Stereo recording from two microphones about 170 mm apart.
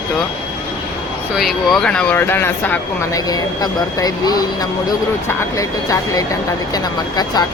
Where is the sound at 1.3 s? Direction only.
Centre (ahead or behind).